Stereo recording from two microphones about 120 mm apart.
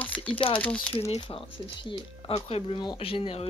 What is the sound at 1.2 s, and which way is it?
Speech, 45° left (ahead or behind).